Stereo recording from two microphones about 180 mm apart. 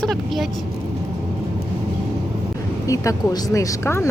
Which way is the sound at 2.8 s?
15° left (ahead or behind).